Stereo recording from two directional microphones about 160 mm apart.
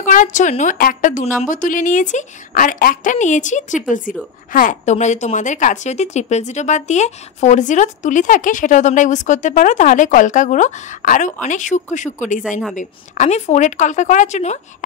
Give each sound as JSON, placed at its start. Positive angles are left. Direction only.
{"t": 0.0, "sound": "a woman's voice", "side_deg": 50}